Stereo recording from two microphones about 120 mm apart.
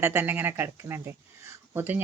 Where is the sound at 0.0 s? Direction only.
20° right (ahead or behind).